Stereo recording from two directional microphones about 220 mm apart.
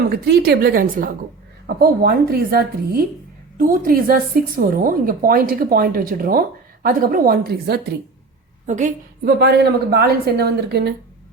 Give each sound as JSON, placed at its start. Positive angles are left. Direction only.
{"t": 0.0, "sound": "a woman's voice", "side_deg": -45}
{"t": 9.4, "sound": "speech", "side_deg": -50}